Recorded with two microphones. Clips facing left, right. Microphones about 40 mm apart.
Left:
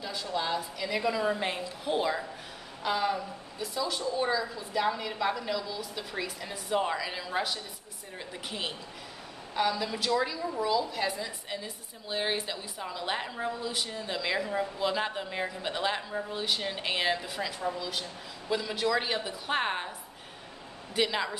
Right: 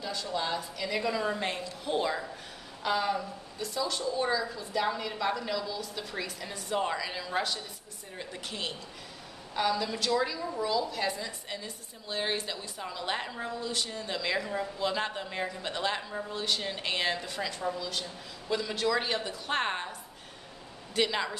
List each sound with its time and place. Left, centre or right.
0.0 s a woman's voice: centre
20.9 s speech: centre